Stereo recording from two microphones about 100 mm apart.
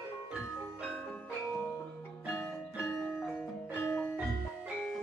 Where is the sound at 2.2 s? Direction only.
25° left (ahead or behind).